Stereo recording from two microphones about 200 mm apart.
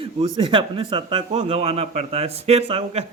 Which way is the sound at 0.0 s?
25° right (ahead or behind).